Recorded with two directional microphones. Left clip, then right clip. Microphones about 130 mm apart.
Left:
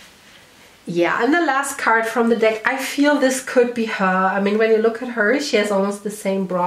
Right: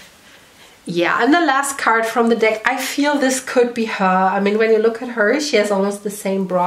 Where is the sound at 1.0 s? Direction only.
25° right (ahead or behind).